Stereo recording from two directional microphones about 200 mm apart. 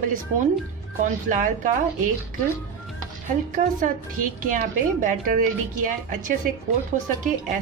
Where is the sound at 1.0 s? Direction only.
40° right (ahead or behind).